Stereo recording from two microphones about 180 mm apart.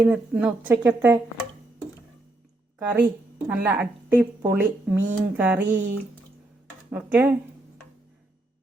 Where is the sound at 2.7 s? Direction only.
10° right (ahead or behind).